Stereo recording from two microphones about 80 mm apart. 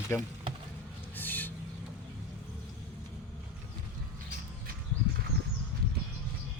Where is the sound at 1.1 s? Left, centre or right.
Left.